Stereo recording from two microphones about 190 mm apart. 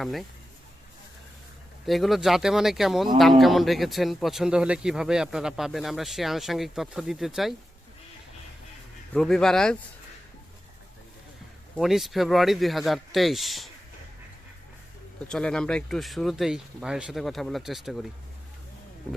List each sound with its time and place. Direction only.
0.0 s speech: centre (ahead or behind)
1.9 s speech: centre (ahead or behind)
9.1 s speech: centre (ahead or behind)
11.8 s speech: centre (ahead or behind)
15.3 s speech: 5° left (ahead or behind)